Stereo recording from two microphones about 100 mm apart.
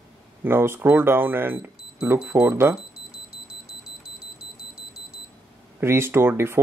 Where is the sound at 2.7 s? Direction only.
5° right (ahead or behind).